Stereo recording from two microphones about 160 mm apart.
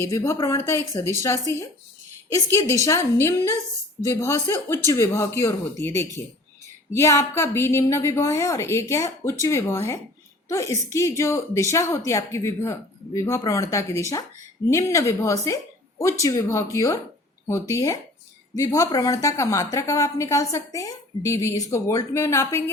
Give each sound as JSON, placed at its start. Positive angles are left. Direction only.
{"t": 0.0, "sound": "a woman's voice", "side_deg": 20}
{"t": 6.9, "sound": "a woman's voice", "side_deg": 20}